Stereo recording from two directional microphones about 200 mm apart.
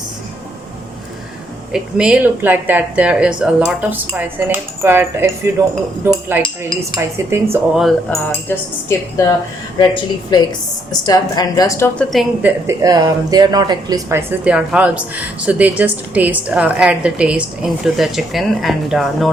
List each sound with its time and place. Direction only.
1.7 s speech: 5° right (ahead or behind)
7.8 s a woman's voice: 5° left (ahead or behind)
11.9 s speech: centre (ahead or behind)